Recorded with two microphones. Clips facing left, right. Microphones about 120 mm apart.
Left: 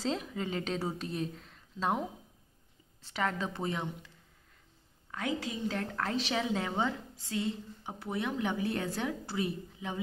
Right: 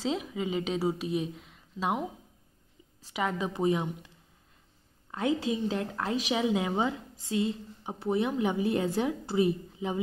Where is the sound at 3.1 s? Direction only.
10° right (ahead or behind).